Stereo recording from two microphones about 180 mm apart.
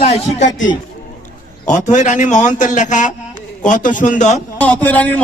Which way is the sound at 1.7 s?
45° left (ahead or behind).